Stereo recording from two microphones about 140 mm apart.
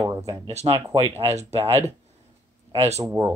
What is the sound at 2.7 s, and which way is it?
Speech, 50° right (ahead or behind).